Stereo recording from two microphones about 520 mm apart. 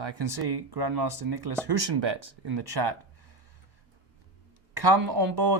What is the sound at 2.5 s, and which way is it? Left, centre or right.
Speech, right.